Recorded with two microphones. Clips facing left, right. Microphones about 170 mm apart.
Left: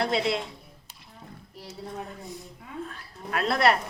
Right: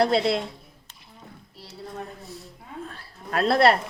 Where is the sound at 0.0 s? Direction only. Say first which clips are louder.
Right 5 dB; 35° right (ahead or behind).